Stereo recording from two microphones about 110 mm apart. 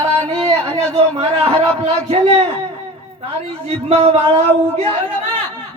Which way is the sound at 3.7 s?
65° right (ahead or behind).